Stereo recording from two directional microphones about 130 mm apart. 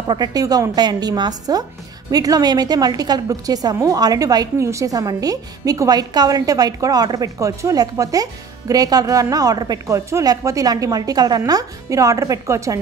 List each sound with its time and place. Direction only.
0.0 s a woman's voice: 35° right (ahead or behind)